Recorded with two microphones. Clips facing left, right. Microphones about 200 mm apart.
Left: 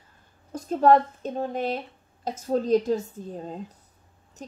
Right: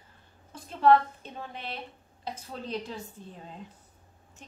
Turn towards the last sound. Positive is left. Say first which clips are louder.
# left 11 dB
turn(degrees=40)  # may be behind; listen again after turning